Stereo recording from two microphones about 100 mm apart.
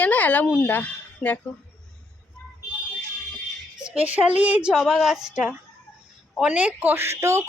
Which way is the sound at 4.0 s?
15° right (ahead or behind).